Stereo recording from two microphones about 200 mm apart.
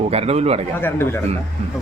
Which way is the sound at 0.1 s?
30° right (ahead or behind).